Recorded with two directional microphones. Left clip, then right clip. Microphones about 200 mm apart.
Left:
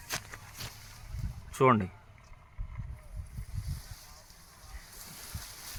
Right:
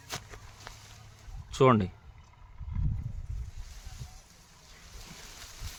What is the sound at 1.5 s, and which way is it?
Speech, 45° right (ahead or behind).